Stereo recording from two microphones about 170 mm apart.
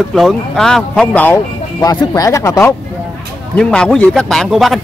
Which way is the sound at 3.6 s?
5° left (ahead or behind).